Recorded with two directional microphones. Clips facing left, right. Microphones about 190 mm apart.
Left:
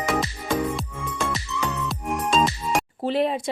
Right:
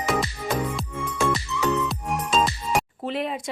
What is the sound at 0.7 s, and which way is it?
Music, centre (ahead or behind).